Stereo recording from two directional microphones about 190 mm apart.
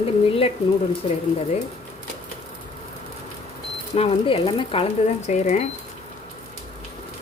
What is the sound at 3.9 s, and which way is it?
Speech, 30° left (ahead or behind).